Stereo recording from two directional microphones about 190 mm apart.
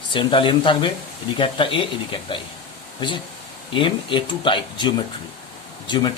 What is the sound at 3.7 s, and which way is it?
Speech, 25° left (ahead or behind).